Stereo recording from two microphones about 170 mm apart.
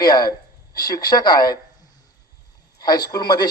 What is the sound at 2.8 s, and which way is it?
Speech, 25° left (ahead or behind).